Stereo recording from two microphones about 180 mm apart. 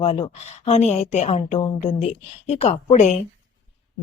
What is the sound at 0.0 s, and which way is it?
Speech, 30° left (ahead or behind).